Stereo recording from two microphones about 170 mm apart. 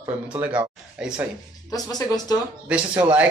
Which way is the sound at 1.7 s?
20° left (ahead or behind).